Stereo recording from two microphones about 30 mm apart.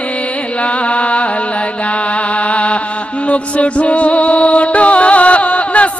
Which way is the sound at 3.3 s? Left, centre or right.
Left.